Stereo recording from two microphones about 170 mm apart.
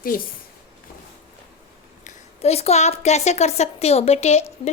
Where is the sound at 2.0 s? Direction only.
40° left (ahead or behind).